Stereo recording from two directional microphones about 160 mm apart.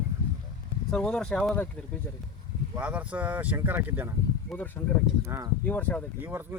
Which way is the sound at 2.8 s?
10° right (ahead or behind).